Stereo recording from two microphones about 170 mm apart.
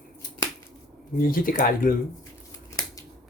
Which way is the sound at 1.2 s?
55° left (ahead or behind).